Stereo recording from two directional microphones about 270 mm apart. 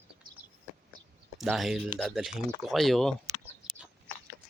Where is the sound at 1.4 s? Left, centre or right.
Centre.